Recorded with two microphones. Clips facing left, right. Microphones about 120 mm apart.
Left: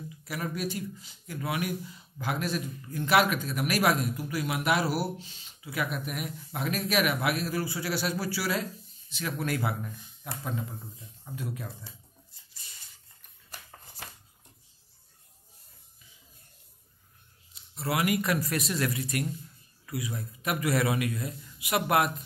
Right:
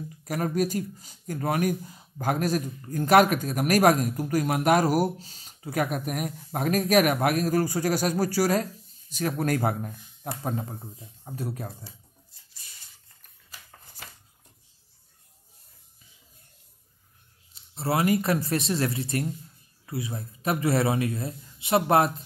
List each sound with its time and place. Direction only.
0.1 s speech: 45° right (ahead or behind)
17.7 s a man's voice: 30° right (ahead or behind)